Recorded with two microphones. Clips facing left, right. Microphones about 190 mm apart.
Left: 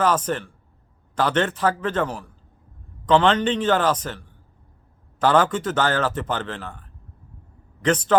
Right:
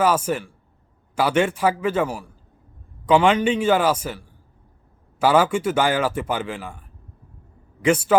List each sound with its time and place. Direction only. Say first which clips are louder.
0.0 s speech: right 1 dB; 10° right (ahead or behind)